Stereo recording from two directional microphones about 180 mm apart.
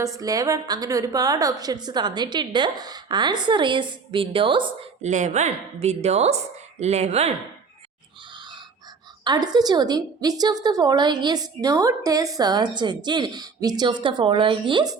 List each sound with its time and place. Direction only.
0.0 s a woman's voice: 20° right (ahead or behind)
5.0 s a woman's voice: 40° right (ahead or behind)
8.4 s pig: 25° right (ahead or behind)
9.2 s a woman's voice: 25° right (ahead or behind)